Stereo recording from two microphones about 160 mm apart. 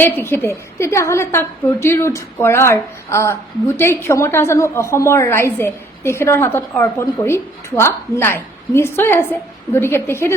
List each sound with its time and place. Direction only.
0.0 s a woman's voice: 15° left (ahead or behind)